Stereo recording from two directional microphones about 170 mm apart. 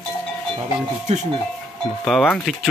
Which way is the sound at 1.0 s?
40° right (ahead or behind).